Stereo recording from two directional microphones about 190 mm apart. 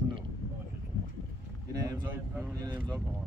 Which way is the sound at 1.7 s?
20° right (ahead or behind).